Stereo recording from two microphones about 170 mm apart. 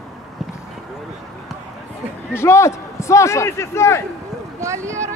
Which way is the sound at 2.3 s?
15° left (ahead or behind).